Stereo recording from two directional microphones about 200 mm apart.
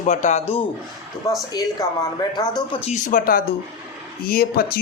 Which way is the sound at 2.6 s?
35° left (ahead or behind).